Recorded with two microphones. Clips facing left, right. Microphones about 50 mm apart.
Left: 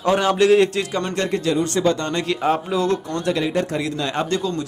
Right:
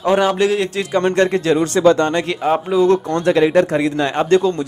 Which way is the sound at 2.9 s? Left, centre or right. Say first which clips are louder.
Right 7 dB; right.